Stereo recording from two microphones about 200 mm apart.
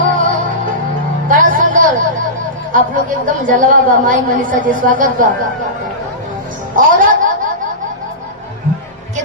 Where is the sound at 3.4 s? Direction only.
40° right (ahead or behind).